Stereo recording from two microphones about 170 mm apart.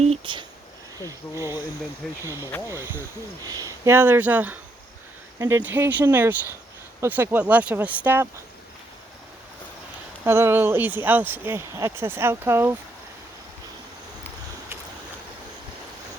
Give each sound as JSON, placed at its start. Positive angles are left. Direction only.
{"t": 0.0, "sound": "speech", "side_deg": -35}
{"t": 0.9, "sound": "speech", "side_deg": -20}
{"t": 10.2, "sound": "speech", "side_deg": -15}